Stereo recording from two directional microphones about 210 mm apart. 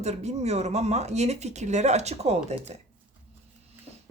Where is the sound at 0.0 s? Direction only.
30° right (ahead or behind).